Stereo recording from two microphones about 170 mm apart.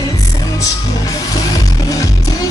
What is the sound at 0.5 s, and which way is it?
Music, 20° left (ahead or behind).